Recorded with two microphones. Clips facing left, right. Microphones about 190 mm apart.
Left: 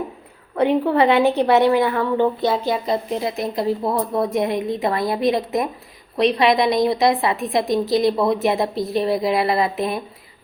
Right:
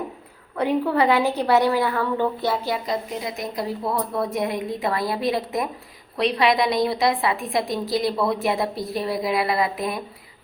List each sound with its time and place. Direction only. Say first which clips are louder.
0.5 s a woman's voice: left 4 dB; 25° left (ahead or behind)